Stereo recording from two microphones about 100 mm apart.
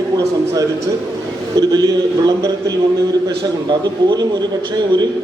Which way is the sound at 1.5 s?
40° right (ahead or behind).